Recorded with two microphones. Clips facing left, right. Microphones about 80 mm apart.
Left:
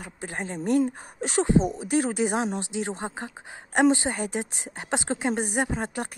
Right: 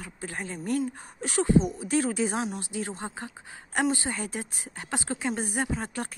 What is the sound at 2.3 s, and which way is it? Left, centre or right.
Speech, left.